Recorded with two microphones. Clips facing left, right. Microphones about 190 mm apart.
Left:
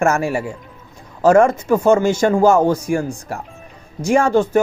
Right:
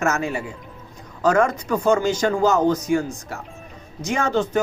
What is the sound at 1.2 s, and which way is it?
Speech, 25° left (ahead or behind).